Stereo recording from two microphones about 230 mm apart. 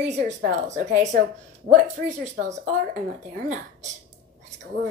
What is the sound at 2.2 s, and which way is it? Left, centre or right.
Speech, right.